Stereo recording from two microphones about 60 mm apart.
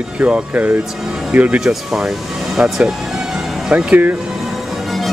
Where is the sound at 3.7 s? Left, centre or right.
Right.